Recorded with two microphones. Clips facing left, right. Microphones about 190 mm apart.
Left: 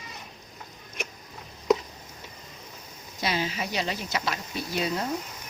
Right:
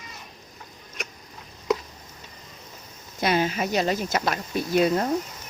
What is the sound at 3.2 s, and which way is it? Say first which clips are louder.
Speech: right 6 dB; 55° right (ahead or behind).